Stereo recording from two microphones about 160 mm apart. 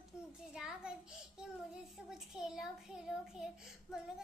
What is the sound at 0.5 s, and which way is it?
Child singing, 5° right (ahead or behind).